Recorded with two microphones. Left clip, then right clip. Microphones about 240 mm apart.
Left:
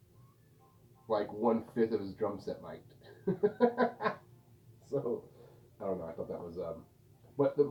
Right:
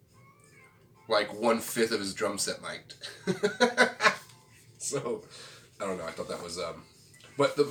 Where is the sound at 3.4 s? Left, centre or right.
Centre.